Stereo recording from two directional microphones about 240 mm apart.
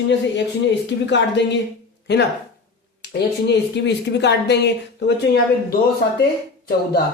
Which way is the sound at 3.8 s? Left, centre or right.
Left.